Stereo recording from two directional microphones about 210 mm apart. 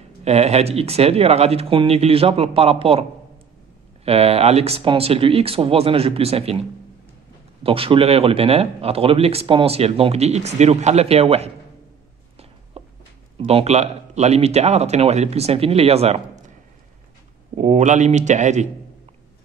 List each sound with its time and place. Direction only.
0.2 s a man's voice: 30° right (ahead or behind)
7.6 s a man's voice: 25° right (ahead or behind)
12.7 s a sound: 30° right (ahead or behind)
13.4 s a man's voice: 30° right (ahead or behind)
17.6 s a man's voice: 35° right (ahead or behind)